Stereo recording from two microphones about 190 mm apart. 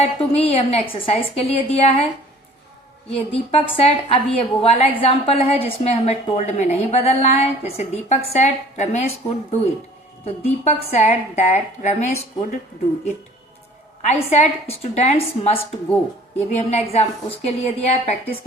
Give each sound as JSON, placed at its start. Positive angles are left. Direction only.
{"t": 0.0, "sound": "a woman's voice", "side_deg": 30}
{"t": 3.1, "sound": "a woman's voice", "side_deg": 30}
{"t": 14.1, "sound": "a woman's voice", "side_deg": 35}